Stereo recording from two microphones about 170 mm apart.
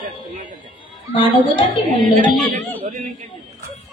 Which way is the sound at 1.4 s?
30° left (ahead or behind).